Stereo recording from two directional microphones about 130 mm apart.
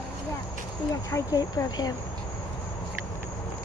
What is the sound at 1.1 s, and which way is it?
Speech, 30° left (ahead or behind).